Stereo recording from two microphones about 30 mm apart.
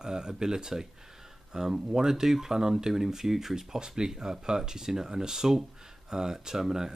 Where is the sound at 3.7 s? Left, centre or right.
Right.